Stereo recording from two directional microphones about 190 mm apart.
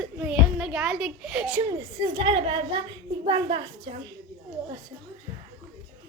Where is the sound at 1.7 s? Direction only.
20° right (ahead or behind).